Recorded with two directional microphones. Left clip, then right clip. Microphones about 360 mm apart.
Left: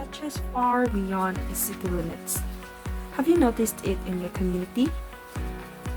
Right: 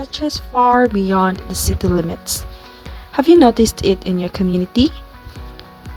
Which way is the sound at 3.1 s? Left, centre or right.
Right.